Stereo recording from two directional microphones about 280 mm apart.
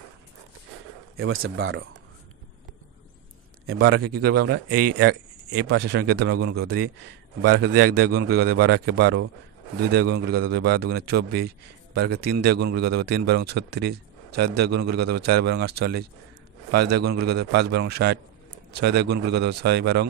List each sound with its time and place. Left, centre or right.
1.1 s speech: right
3.6 s speech: right
6.5 s speech: right
7.4 s a man's voice: right